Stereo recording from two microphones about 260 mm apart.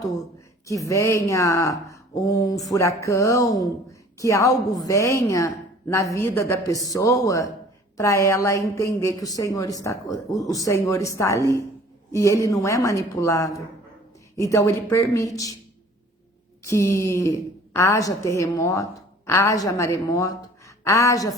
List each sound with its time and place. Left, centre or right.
0.7 s a woman's voice: centre
16.6 s a woman's voice: centre